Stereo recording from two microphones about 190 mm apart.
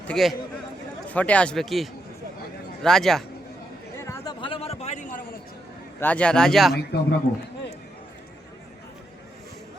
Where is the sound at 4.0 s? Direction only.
15° left (ahead or behind).